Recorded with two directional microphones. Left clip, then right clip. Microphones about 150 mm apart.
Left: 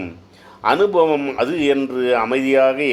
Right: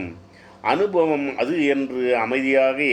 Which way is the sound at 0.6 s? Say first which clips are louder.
Left 4 dB; 25° left (ahead or behind).